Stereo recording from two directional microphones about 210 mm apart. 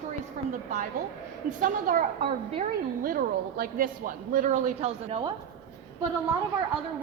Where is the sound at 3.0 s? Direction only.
45° right (ahead or behind); by 5.3 s 30° right (ahead or behind).